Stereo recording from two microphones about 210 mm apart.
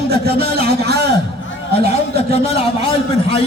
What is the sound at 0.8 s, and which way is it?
Speech, 50° right (ahead or behind).